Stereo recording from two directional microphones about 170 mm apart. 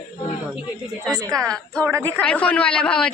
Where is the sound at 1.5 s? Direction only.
5° left (ahead or behind).